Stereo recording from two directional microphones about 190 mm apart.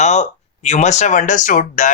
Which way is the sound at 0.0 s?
35° left (ahead or behind).